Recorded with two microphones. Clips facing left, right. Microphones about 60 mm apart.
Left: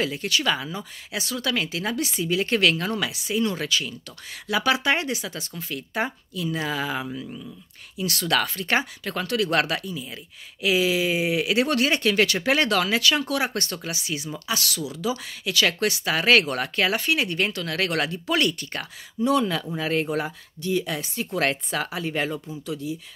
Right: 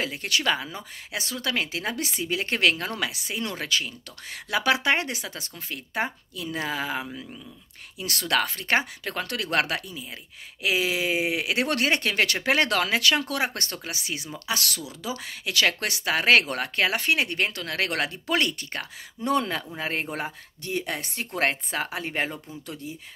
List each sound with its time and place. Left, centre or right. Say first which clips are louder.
0.0 s speech: left 2 dB; right
14.5 s speech: even; right
14.9 s speech: left 5 dB; right
19.2 s speech: left 3 dB; right
21.4 s speech: left 1 dB; right